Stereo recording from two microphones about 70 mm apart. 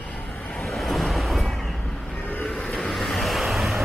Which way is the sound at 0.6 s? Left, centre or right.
Centre.